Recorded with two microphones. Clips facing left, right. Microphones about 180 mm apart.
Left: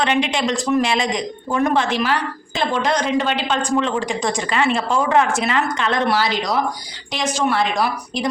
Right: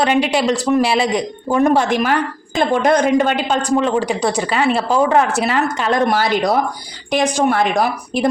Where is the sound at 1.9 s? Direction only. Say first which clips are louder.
Right 4 dB; 50° right (ahead or behind).